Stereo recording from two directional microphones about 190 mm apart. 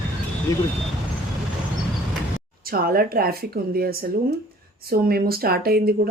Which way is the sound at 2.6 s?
50° right (ahead or behind).